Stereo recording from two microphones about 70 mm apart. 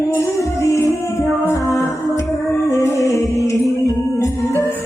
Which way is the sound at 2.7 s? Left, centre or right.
Left.